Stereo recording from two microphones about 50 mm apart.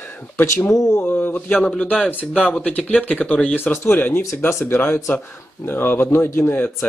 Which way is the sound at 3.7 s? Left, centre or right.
Left.